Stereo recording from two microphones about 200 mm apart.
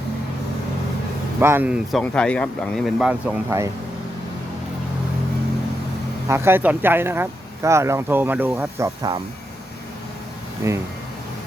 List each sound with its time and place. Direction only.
1.4 s speech: 10° right (ahead or behind)
6.2 s speech: 15° right (ahead or behind)
10.6 s speech: 15° right (ahead or behind)